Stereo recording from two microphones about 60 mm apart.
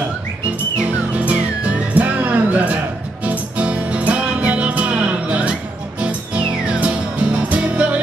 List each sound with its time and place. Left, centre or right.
0.8 s music: right